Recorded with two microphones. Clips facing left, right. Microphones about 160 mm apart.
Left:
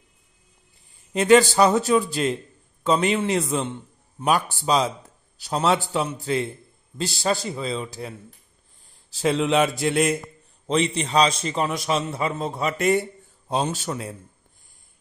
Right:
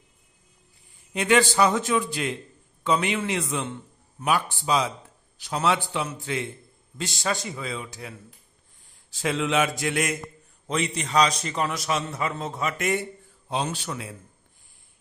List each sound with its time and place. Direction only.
1.1 s a man's voice: 35° left (ahead or behind)
9.1 s a man's voice: 35° left (ahead or behind)